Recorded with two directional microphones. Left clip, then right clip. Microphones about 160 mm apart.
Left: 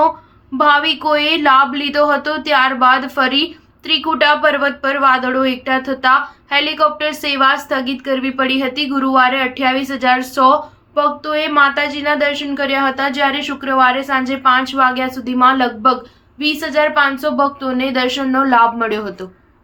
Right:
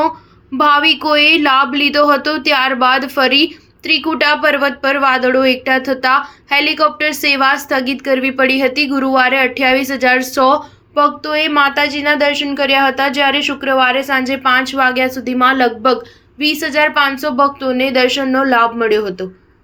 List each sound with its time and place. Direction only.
0.5 s a woman's voice: 15° right (ahead or behind)